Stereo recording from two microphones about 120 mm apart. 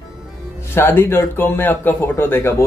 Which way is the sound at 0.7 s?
20° left (ahead or behind).